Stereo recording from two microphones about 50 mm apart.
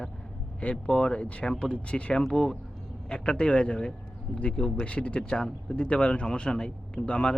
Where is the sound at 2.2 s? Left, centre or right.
Centre.